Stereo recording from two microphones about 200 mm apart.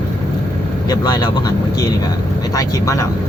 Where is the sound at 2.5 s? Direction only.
15° left (ahead or behind).